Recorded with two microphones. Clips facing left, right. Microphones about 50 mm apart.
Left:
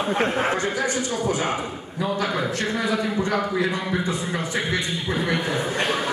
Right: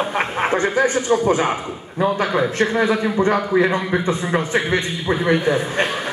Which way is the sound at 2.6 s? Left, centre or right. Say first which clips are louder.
Right 6 dB; right.